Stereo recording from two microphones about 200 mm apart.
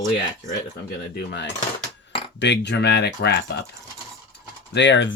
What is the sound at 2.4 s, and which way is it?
Speech, 60° left (ahead or behind).